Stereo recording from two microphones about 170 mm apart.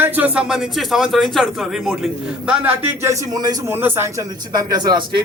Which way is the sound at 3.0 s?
20° right (ahead or behind).